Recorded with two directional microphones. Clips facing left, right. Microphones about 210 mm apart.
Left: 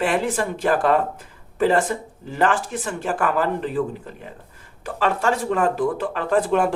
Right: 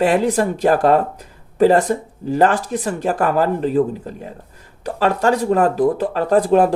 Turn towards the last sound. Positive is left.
turn(degrees=-35)  # may be behind; listen again after turning